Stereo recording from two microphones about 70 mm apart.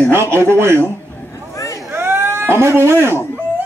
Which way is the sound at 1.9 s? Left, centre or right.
Right.